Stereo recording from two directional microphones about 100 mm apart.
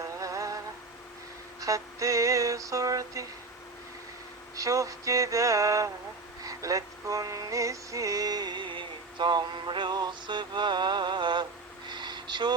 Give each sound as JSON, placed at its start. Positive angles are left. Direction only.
{"t": 0.0, "sound": "music", "side_deg": -30}
{"t": 1.6, "sound": "female singing", "side_deg": -35}
{"t": 4.5, "sound": "female singing", "side_deg": -35}
{"t": 6.4, "sound": "music", "side_deg": -35}
{"t": 11.9, "sound": "a sound", "side_deg": -50}